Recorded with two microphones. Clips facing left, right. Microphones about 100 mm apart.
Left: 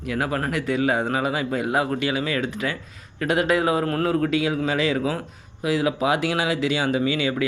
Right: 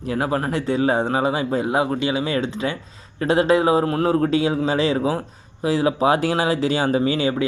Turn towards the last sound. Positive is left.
turn(degrees=-30)  # may be behind; listen again after turning